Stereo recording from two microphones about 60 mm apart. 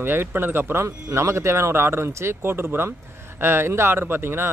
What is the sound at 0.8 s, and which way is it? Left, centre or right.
Speech, right.